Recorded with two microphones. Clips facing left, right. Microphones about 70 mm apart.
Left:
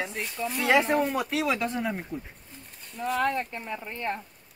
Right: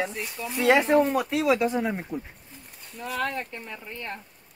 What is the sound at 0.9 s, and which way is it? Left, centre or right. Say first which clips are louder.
Speech: right 4 dB; centre.